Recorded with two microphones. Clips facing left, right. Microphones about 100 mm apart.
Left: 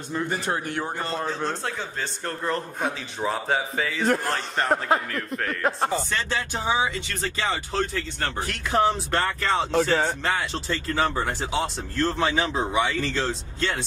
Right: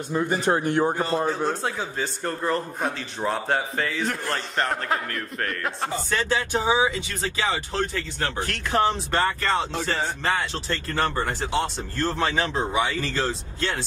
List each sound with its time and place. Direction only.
0.1 s speech: 20° right (ahead or behind)
0.9 s speech: 5° right (ahead or behind)
4.6 s a man's voice: 20° left (ahead or behind)
5.1 s speech: centre (ahead or behind)
5.6 s speech: 35° left (ahead or behind)
6.0 s speech: 10° right (ahead or behind)